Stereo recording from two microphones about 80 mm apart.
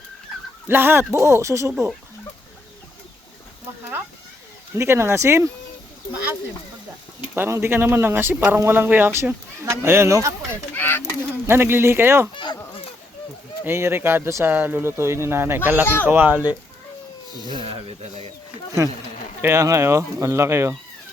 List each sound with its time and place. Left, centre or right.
0.7 s speech: right
4.7 s speech: right
7.3 s speech: right
10.8 s fowl: left
11.4 s speech: right
12.3 s a sound: left
13.7 s speech: right
17.3 s speech: right
18.8 s speech: right
19.4 s speech: right